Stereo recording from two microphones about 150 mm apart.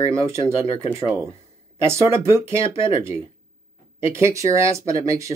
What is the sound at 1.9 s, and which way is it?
Speech, 15° right (ahead or behind).